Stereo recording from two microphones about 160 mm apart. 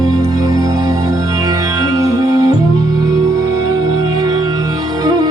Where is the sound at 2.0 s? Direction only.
25° right (ahead or behind).